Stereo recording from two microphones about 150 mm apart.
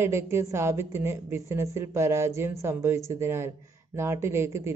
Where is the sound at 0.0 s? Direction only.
15° right (ahead or behind).